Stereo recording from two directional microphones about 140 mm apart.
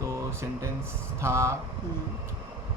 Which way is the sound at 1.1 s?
20° right (ahead or behind).